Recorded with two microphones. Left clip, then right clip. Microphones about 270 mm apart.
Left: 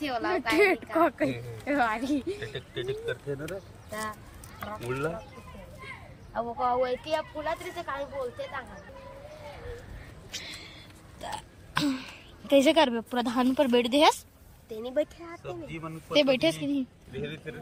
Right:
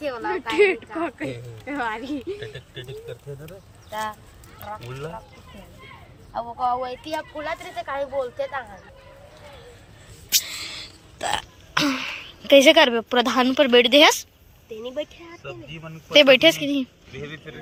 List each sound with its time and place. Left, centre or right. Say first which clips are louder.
0.0 s a woman's voice: right 2 dB; centre
2.4 s speech: left 1 dB; right
4.8 s speech: left 4 dB; right
6.6 s speech: right 2 dB; centre
11.3 s speech: right 5 dB; centre
15.7 s speech: even; right
16.1 s speech: right 10 dB; centre